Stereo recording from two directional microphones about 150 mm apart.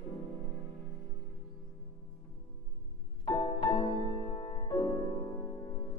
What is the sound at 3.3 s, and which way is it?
Music, 30° left (ahead or behind).